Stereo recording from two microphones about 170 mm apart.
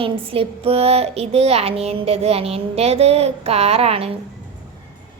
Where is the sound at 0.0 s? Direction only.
35° right (ahead or behind).